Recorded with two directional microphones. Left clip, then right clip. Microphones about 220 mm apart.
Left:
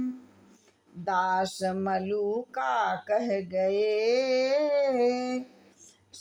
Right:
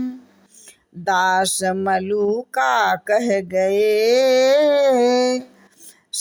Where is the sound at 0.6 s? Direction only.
20° right (ahead or behind).